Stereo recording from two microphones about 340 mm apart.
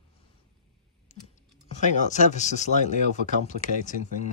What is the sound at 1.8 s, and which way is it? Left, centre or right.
Speech, left.